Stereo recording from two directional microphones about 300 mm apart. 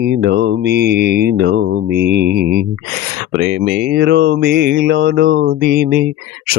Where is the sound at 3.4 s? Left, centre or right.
Right.